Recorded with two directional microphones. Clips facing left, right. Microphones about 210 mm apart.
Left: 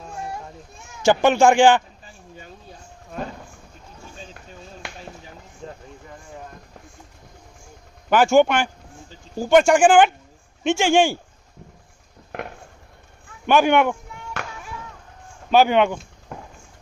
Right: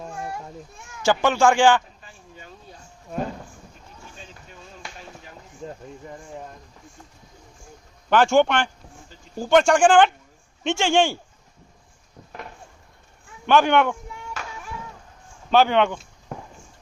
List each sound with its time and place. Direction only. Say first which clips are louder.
1.0 s a man's voice: left 3 dB; 20° left (ahead or behind)
8.1 s a man's voice: left 2 dB; 5° left (ahead or behind)
13.5 s a man's voice: left 1 dB; 10° left (ahead or behind)
15.5 s a man's voice: left 2 dB; 10° left (ahead or behind)